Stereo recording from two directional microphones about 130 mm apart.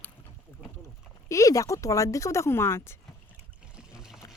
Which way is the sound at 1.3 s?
25° left (ahead or behind).